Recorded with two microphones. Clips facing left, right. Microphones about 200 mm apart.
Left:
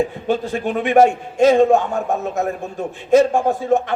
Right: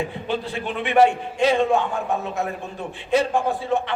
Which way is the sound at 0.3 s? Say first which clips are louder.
Left 6 dB; 45° left (ahead or behind).